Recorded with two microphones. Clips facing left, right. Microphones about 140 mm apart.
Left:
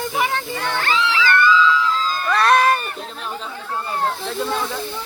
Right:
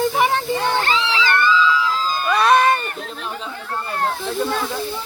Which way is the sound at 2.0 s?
10° right (ahead or behind).